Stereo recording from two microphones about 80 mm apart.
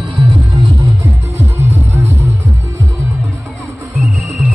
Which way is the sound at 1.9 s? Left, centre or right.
Right.